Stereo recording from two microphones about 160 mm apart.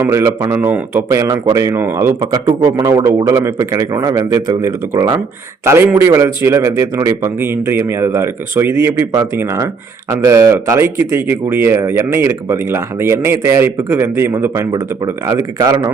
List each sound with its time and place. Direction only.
0.0 s speech: 15° right (ahead or behind)